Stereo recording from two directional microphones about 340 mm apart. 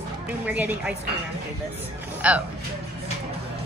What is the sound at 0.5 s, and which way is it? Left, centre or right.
Speech, centre.